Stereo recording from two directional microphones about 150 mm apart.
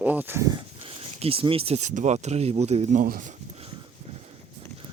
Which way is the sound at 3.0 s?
65° right (ahead or behind).